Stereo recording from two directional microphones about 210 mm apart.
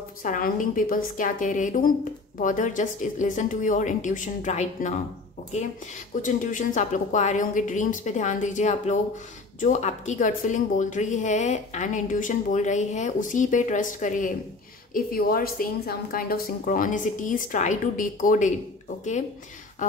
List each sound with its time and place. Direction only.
0.2 s a woman's voice: 40° left (ahead or behind)
6.2 s a woman's voice: 35° left (ahead or behind)